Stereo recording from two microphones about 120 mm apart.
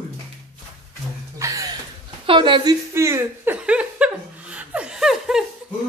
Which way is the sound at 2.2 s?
40° right (ahead or behind).